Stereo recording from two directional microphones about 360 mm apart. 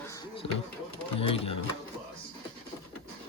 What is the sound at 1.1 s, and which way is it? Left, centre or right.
Speech, centre.